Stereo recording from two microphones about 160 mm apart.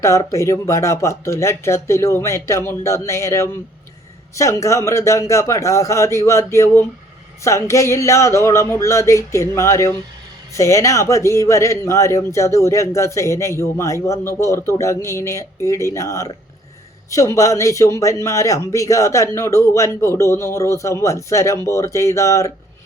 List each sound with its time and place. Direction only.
0.0 s a man's voice: 20° left (ahead or behind)